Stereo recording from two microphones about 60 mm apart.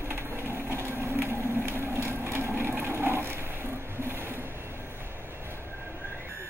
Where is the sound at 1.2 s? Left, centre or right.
Right.